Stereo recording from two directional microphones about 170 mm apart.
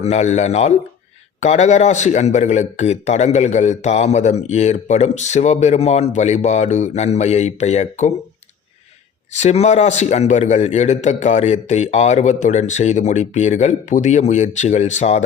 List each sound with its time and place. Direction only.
0.0 s a man's voice: 40° left (ahead or behind)
9.3 s a man's voice: 40° left (ahead or behind)